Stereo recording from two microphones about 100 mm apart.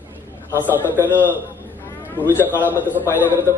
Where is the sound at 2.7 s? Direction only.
20° right (ahead or behind).